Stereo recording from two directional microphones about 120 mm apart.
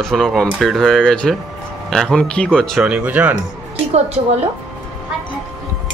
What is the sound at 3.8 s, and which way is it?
Speech, 60° right (ahead or behind).